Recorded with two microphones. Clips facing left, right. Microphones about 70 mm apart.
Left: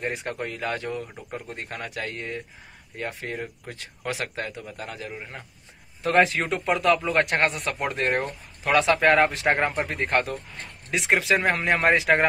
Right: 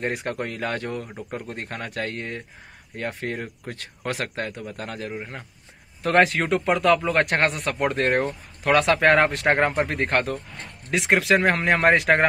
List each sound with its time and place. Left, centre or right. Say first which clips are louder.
0.0 s speech: right 3 dB; right
6.0 s speech: right 2 dB; right